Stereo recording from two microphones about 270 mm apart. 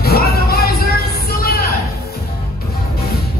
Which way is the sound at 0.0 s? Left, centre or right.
Left.